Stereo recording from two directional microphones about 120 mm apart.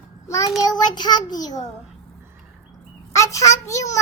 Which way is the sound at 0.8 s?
35° left (ahead or behind).